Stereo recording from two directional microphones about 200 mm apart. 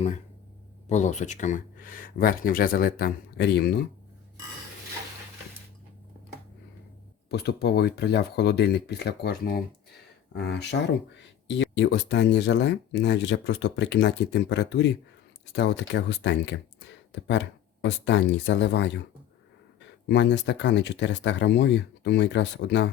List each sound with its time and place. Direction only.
0.9 s speech: 35° left (ahead or behind); by 3.8 s 55° left (ahead or behind)
7.3 s speech: 55° left (ahead or behind)
20.1 s speech: 60° left (ahead or behind)